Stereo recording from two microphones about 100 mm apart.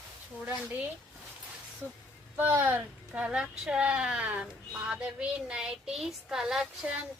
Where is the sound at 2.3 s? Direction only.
20° right (ahead or behind).